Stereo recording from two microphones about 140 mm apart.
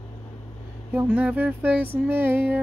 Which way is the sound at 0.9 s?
10° right (ahead or behind).